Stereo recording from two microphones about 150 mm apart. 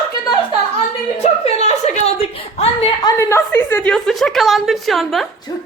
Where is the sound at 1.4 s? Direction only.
45° left (ahead or behind).